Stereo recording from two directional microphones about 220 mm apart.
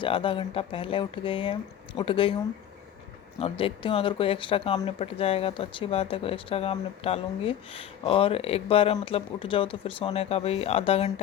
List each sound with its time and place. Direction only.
0.0 s speech: 25° left (ahead or behind)
3.3 s speech: 25° left (ahead or behind)